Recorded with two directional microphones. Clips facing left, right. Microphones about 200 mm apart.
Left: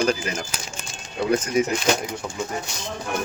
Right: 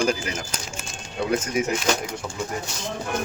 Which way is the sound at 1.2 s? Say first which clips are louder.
Left 3 dB; 5° left (ahead or behind).